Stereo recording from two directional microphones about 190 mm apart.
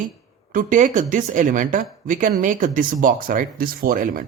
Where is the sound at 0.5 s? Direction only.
40° right (ahead or behind).